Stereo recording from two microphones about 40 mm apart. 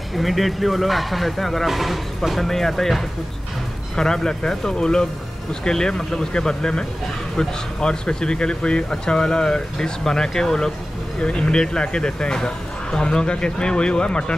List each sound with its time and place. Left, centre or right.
0.1 s speech: centre
2.4 s speech: centre
11.1 s speech: left